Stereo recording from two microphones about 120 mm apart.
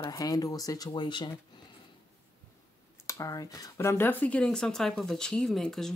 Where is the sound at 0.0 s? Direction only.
30° left (ahead or behind).